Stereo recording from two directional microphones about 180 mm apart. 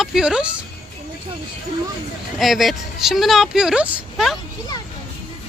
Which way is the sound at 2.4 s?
Centre (ahead or behind).